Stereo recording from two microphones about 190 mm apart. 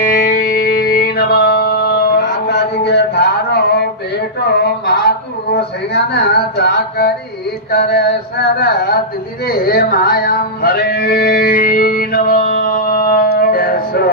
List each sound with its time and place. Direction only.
0.0 s music: 45° left (ahead or behind)
7.7 s mantra: 60° left (ahead or behind)
9.5 s music: 55° left (ahead or behind)